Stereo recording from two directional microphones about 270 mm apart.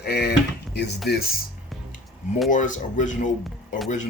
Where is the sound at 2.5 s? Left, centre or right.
Left.